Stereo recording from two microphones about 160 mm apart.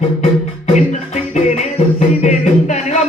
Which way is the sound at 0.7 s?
50° left (ahead or behind).